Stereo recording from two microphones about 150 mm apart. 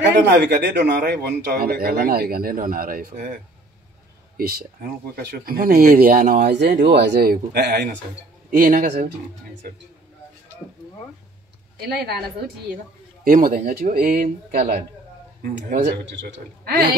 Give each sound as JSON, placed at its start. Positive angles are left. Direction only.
{"t": 0.3, "sound": "a man's voice", "side_deg": -90}
{"t": 4.4, "sound": "a woman's voice", "side_deg": -90}
{"t": 8.5, "sound": "speech", "side_deg": -65}
{"t": 11.8, "sound": "a woman's voice", "side_deg": -90}
{"t": 13.2, "sound": "speech", "side_deg": -70}
{"t": 15.4, "sound": "speech", "side_deg": -60}
{"t": 16.6, "sound": "speech", "side_deg": -90}